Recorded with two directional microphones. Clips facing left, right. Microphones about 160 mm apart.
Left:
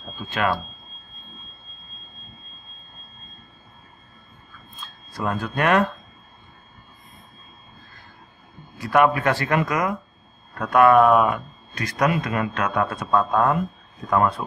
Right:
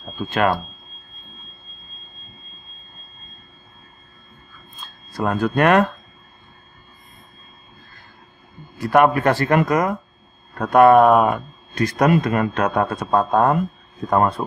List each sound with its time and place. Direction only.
0.3 s speech: 50° right (ahead or behind)
5.2 s speech: 55° right (ahead or behind)
8.8 s speech: 45° right (ahead or behind)
11.7 s speech: 30° right (ahead or behind)
12.1 s speech: 45° right (ahead or behind)
12.5 s speech: 35° right (ahead or behind)